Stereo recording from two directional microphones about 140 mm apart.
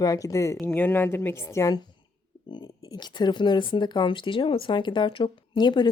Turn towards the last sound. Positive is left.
turn(degrees=30)  # may be behind; listen again after turning